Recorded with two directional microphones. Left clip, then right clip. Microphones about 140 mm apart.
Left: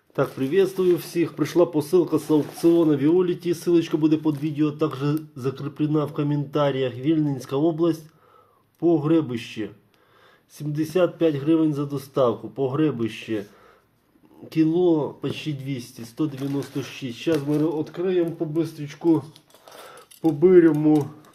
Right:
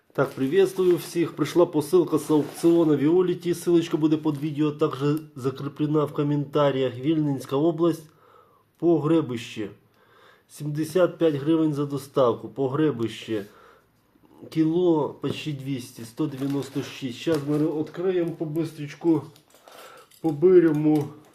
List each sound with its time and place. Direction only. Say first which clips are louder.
0.1 s speech: left 1 dB; centre (ahead or behind)
14.5 s speech: left 2 dB; 5° left (ahead or behind)
17.3 s speech: left 2 dB; 15° left (ahead or behind)
20.2 s speech: left 2 dB; 30° left (ahead or behind)